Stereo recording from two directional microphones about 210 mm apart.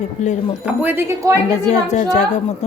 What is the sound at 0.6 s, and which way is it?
Speech, 10° right (ahead or behind).